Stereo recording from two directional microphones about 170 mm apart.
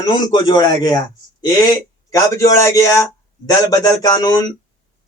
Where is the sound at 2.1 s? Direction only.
20° left (ahead or behind).